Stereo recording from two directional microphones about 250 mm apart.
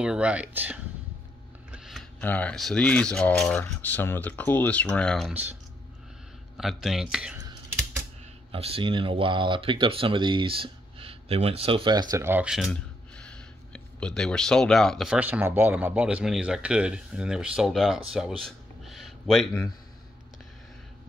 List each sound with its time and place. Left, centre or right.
0.0 s speech: centre
6.5 s speech: centre
8.5 s speech: right; by 18.3 s centre
18.4 s a sound: centre